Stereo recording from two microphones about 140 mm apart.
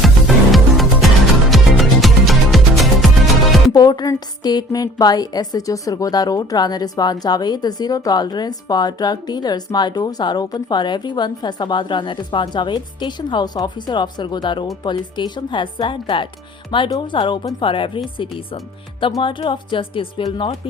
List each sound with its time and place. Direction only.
0.5 s music: centre (ahead or behind)
3.7 s a woman's voice: 30° left (ahead or behind)